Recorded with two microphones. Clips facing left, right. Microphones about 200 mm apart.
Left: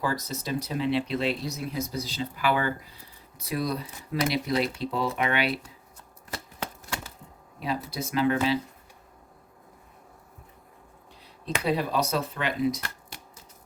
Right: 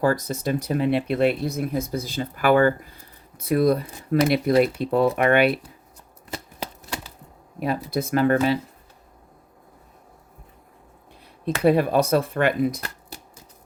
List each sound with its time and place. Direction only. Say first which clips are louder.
0.0 s speech: right 8 dB; 55° right (ahead or behind)
7.6 s speech: right 6 dB; 55° right (ahead or behind)
11.6 s speech: right 9 dB; 55° right (ahead or behind)